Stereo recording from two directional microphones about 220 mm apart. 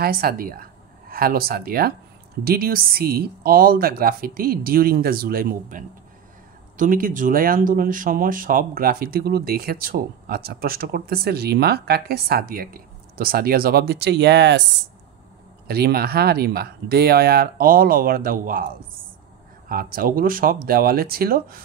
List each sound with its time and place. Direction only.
0.0 s speech: 45° right (ahead or behind)
15.6 s speech: 45° right (ahead or behind)
19.7 s speech: 40° right (ahead or behind)